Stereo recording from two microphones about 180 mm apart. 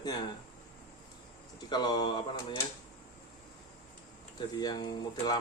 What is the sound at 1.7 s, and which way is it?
Speech, 25° left (ahead or behind).